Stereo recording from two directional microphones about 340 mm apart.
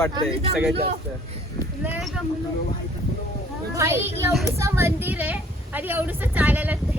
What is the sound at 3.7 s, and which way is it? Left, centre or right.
A child's voice, centre.